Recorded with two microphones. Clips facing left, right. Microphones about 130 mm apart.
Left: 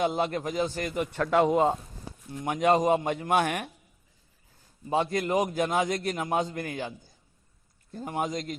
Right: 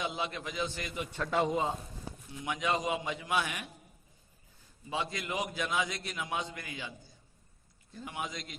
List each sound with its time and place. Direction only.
0.0 s a man's voice: 50° left (ahead or behind)
2.3 s a man's voice: 50° left (ahead or behind)
4.8 s a man's voice: 50° left (ahead or behind)